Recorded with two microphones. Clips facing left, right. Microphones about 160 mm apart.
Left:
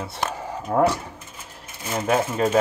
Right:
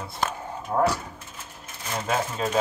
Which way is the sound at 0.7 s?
80° left.